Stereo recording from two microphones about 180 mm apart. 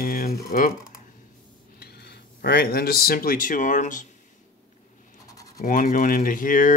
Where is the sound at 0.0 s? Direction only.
50° left (ahead or behind).